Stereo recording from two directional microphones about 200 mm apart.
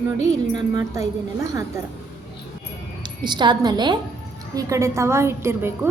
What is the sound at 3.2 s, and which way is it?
A woman's voice, 20° right (ahead or behind).